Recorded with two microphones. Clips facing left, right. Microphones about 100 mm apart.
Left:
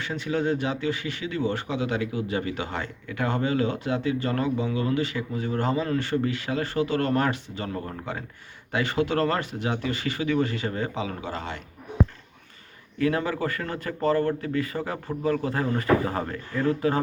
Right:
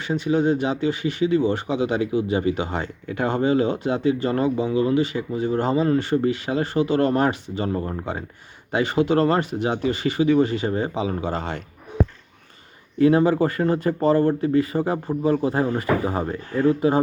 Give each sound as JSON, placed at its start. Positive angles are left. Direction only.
{"t": 0.1, "sound": "speech", "side_deg": -20}
{"t": 13.0, "sound": "speech", "side_deg": -25}